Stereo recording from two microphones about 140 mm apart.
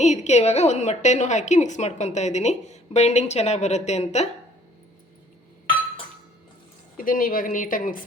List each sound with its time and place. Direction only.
0.0 s a woman's voice: 55° left (ahead or behind)
6.9 s a woman's voice: 80° left